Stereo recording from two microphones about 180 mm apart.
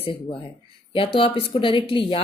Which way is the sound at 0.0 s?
30° left (ahead or behind).